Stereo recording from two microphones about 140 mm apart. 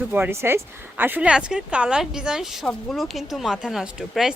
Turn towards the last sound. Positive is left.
turn(degrees=0)  # may be behind; listen again after turning